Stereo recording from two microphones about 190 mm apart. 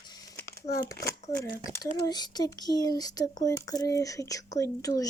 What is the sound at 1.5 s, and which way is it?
Speech, 20° left (ahead or behind).